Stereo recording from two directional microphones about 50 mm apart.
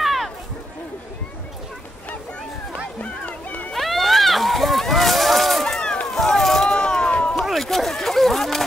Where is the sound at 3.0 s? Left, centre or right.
Left.